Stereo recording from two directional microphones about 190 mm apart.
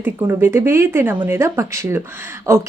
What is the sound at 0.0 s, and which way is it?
Speech, 15° right (ahead or behind).